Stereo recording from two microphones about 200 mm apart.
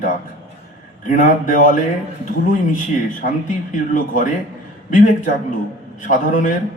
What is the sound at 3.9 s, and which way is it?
Speech, 40° left (ahead or behind).